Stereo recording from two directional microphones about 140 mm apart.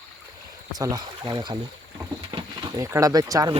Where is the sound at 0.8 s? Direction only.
25° right (ahead or behind).